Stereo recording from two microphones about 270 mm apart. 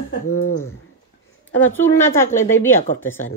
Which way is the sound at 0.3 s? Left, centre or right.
Left.